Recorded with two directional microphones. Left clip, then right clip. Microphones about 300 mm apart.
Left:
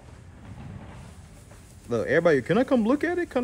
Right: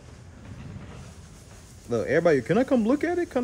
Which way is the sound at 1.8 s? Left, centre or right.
Centre.